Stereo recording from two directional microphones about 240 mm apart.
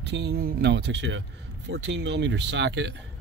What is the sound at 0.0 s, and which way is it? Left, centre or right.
Speech, right.